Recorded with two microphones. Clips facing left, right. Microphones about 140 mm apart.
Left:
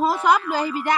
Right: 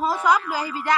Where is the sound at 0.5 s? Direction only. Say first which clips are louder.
Left 4 dB; 20° left (ahead or behind).